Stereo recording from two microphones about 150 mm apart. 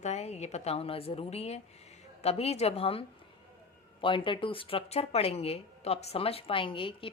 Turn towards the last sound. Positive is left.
turn(degrees=35)  # may be behind; listen again after turning